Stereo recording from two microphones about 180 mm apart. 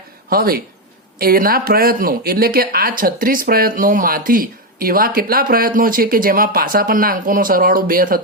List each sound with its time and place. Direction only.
0.3 s speech: 55° right (ahead or behind)